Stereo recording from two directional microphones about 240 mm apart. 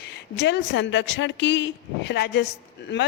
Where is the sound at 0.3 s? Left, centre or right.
Left.